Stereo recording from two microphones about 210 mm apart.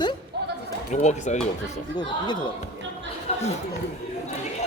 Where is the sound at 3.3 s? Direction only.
30° left (ahead or behind).